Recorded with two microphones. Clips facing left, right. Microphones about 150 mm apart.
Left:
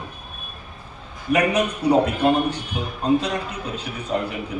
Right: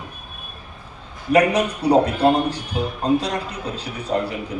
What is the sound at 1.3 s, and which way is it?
A man's voice, 35° right (ahead or behind).